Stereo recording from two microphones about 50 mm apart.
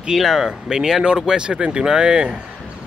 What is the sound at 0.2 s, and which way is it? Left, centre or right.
Speech, centre.